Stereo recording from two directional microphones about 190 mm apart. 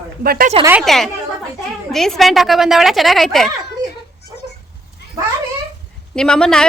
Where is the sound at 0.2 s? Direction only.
50° right (ahead or behind).